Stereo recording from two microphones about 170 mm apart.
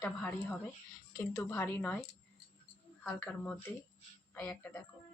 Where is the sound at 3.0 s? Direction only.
5° left (ahead or behind).